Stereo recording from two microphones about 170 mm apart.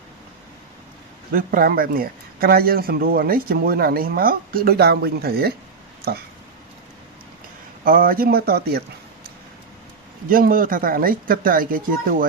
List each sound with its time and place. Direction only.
1.3 s speech: 55° right (ahead or behind)
7.9 s speech: 55° right (ahead or behind)
10.2 s speech: 55° right (ahead or behind)